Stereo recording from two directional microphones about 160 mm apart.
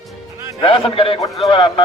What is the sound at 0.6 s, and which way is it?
A man's voice, 35° left (ahead or behind).